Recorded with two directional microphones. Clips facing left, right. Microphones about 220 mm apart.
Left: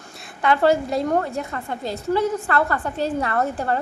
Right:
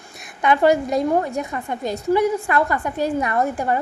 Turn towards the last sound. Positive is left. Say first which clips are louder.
# right 2 dB
turn(degrees=-15)  # may be behind; listen again after turning